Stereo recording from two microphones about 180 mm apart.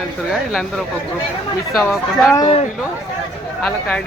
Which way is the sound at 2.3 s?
25° left (ahead or behind).